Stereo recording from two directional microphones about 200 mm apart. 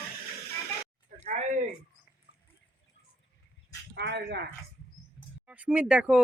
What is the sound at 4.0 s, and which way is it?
Speech, 55° right (ahead or behind).